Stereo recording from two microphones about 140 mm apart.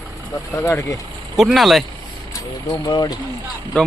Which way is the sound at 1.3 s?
Centre (ahead or behind).